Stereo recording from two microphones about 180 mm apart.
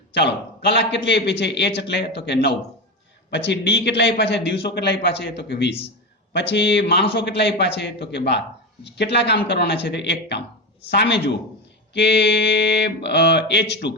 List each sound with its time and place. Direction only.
0.1 s a man's voice: 70° left (ahead or behind)